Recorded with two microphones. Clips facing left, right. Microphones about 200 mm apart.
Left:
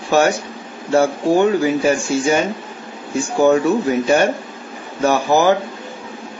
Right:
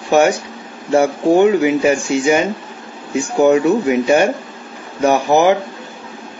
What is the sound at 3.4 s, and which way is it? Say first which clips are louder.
Speech: right 2 dB; 15° right (ahead or behind).